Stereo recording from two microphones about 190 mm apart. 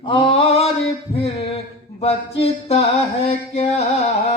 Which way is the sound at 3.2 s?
35° left (ahead or behind).